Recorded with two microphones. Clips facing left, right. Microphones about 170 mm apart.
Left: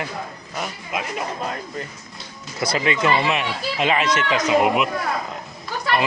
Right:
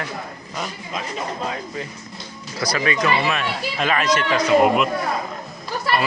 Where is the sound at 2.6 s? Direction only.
25° left (ahead or behind).